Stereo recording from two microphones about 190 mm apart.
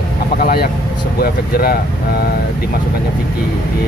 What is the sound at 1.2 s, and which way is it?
Speech, 55° left (ahead or behind).